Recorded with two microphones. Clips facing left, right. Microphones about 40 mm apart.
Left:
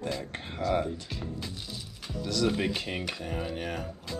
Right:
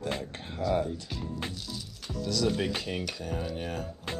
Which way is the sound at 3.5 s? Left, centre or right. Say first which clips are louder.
Left 1 dB; left.